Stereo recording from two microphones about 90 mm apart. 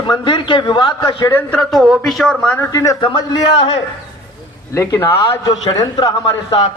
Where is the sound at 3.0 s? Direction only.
60° left (ahead or behind).